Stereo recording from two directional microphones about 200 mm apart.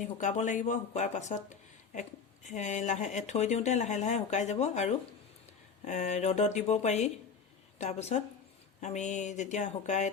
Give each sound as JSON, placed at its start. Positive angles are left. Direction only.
{"t": 0.0, "sound": "speech", "side_deg": 40}